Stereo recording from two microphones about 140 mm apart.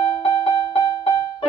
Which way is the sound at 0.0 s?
40° left (ahead or behind).